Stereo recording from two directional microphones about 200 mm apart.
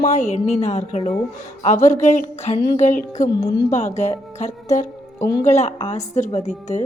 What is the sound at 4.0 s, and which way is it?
Music, 35° left (ahead or behind).